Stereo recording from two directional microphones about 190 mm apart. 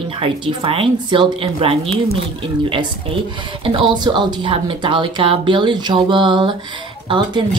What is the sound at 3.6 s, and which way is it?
Speech, 25° right (ahead or behind).